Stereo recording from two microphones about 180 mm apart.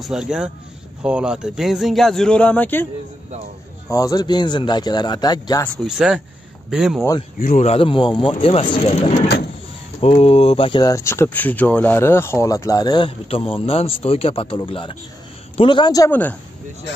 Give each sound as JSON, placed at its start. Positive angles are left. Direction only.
{"t": 0.0, "sound": "speech", "side_deg": -5}
{"t": 3.9, "sound": "speech", "side_deg": 20}
{"t": 5.9, "sound": "speech", "side_deg": -5}
{"t": 7.3, "sound": "speech", "side_deg": 45}
{"t": 16.1, "sound": "speech", "side_deg": 10}